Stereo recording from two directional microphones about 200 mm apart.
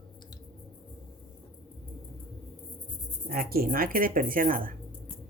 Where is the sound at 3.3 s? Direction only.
50° right (ahead or behind).